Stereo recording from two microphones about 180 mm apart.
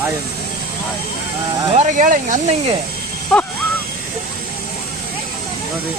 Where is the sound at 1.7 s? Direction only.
40° right (ahead or behind).